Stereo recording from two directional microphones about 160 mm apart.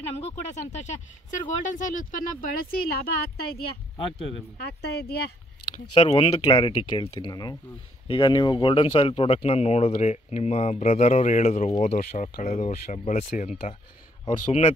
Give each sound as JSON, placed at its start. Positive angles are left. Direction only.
{"t": 0.1, "sound": "speech", "side_deg": 40}
{"t": 4.6, "sound": "speech", "side_deg": 85}
{"t": 5.9, "sound": "speech", "side_deg": 35}